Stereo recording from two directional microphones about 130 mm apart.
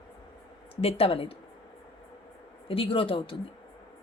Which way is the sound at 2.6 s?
45° left (ahead or behind).